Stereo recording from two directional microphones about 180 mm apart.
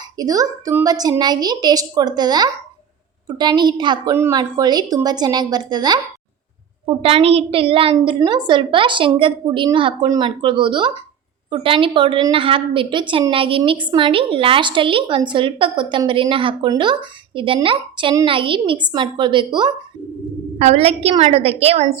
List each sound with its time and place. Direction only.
0.2 s a woman's voice: 20° right (ahead or behind)
20.6 s a woman's voice: 35° right (ahead or behind)